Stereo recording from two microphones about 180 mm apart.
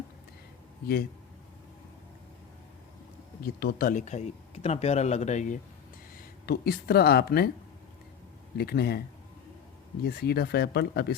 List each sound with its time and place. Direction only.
3.4 s speech: 60° left (ahead or behind); by 5.5 s 40° left (ahead or behind)
6.4 s speech: 60° left (ahead or behind)
8.5 s speech: 60° left (ahead or behind)
10.0 s speech: 60° left (ahead or behind)